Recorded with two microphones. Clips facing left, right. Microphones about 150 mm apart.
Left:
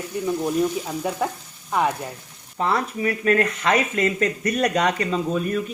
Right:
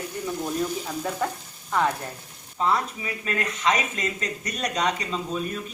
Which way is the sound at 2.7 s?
55° left (ahead or behind).